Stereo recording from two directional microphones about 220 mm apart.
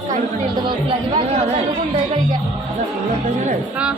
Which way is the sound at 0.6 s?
20° right (ahead or behind).